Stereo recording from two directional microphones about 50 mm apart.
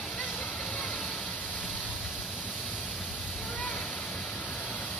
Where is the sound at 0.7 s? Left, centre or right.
Left.